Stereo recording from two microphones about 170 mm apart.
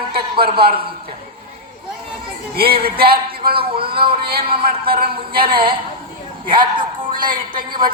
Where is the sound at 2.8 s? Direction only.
65° right (ahead or behind).